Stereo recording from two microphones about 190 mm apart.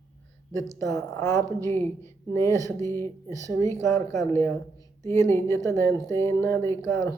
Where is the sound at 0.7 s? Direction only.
15° left (ahead or behind).